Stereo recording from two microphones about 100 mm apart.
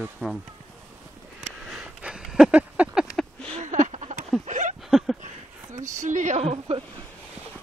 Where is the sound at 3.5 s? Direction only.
90° right.